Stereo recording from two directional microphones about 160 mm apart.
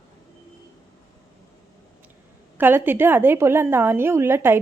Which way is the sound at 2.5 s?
15° right (ahead or behind).